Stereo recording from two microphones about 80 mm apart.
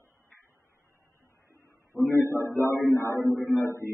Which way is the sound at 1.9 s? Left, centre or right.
Centre.